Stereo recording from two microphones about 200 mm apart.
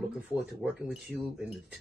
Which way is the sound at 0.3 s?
5° right (ahead or behind).